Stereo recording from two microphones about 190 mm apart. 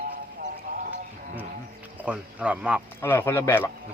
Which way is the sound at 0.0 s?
50° right (ahead or behind).